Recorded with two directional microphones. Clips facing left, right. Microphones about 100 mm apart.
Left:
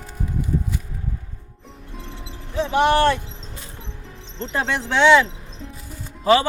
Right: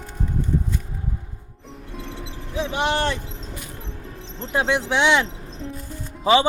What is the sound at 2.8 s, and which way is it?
Speech, 20° right (ahead or behind).